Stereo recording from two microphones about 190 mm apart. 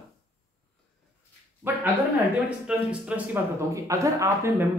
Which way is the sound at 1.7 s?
10° right (ahead or behind).